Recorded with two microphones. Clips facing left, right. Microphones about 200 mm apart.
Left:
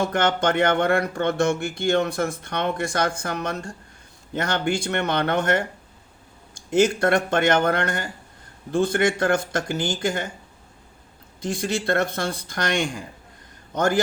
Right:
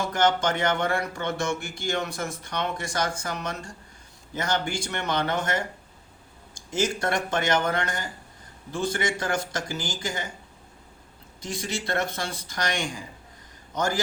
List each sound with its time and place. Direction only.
0.0 s speech: 60° left (ahead or behind)
11.4 s speech: 55° left (ahead or behind)